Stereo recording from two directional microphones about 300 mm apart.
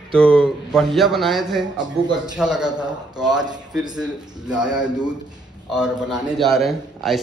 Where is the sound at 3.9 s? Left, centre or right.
Centre.